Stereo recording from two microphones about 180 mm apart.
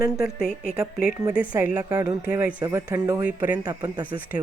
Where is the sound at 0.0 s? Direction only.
55° left (ahead or behind).